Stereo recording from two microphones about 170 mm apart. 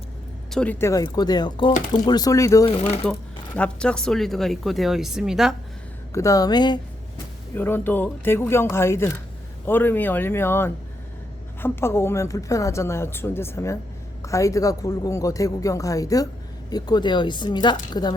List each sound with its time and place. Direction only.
0.5 s speech: 10° left (ahead or behind)
2.6 s speech: 35° left (ahead or behind)
3.1 s speech: 5° left (ahead or behind)
6.1 s speech: 20° left (ahead or behind)
7.5 s speech: 10° left (ahead or behind)